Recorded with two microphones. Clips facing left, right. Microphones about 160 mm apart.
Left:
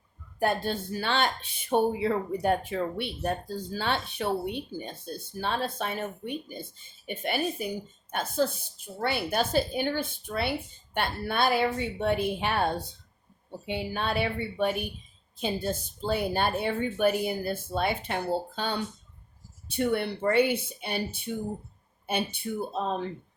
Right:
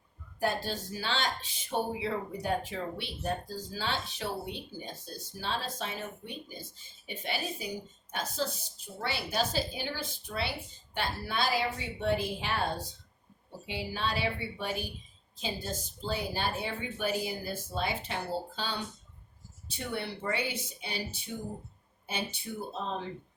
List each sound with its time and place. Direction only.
0.3 s speech: 60° left (ahead or behind)